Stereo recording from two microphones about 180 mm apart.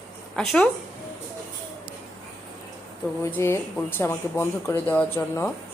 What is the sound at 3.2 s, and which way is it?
Speech, 15° left (ahead or behind).